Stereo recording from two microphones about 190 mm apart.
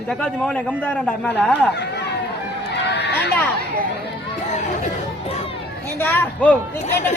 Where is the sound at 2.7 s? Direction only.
65° left (ahead or behind).